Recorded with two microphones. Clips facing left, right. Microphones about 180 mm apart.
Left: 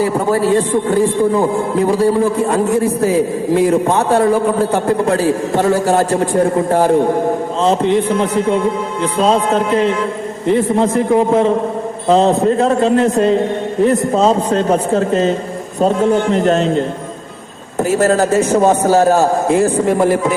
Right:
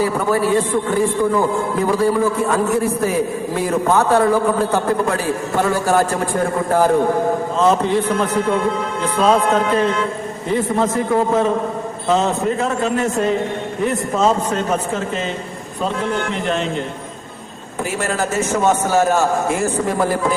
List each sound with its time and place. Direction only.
0.0 s a man's voice: 30° left (ahead or behind)
17.9 s a man's voice: 35° left (ahead or behind)